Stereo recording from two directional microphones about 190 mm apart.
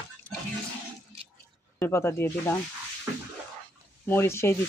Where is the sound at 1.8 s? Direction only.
15° left (ahead or behind).